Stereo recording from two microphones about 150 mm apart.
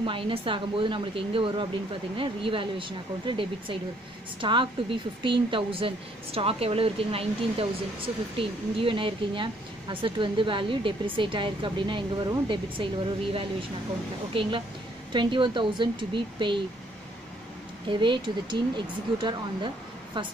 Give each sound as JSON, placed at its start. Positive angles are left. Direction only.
{"t": 0.0, "sound": "speech", "side_deg": -35}
{"t": 17.8, "sound": "speech", "side_deg": -30}